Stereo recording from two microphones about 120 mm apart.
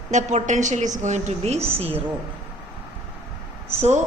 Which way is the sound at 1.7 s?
55° right (ahead or behind).